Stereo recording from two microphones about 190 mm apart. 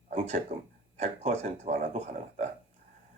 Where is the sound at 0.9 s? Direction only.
35° right (ahead or behind).